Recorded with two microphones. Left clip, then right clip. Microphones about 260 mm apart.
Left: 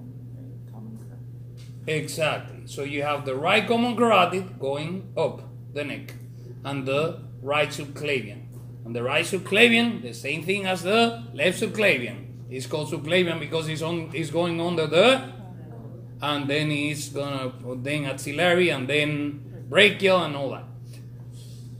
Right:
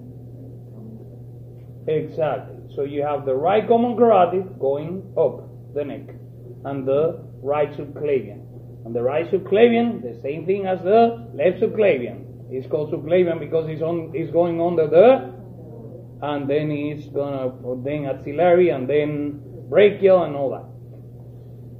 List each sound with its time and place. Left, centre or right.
1.9 s a man's voice: left
6.6 s a man's voice: left
16.2 s a man's voice: left